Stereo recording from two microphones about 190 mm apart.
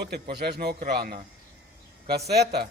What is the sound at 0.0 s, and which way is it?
A man's voice, 55° right (ahead or behind).